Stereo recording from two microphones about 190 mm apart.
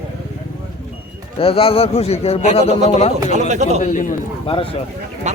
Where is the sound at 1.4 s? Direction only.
30° left (ahead or behind).